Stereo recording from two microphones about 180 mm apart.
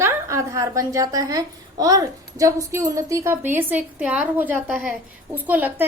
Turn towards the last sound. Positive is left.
turn(degrees=-10)  # may be behind; listen again after turning